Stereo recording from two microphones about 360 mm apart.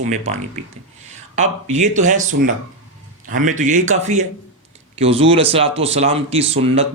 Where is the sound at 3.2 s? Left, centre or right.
Right.